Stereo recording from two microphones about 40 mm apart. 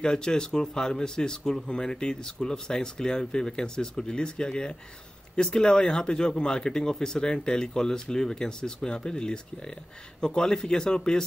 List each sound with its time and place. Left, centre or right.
0.0 s speech: centre